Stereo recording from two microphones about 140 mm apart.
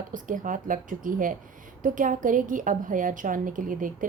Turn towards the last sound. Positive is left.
turn(degrees=-75)  # may be behind; listen again after turning